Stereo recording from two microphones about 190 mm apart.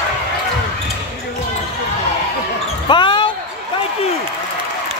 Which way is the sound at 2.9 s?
25° left (ahead or behind).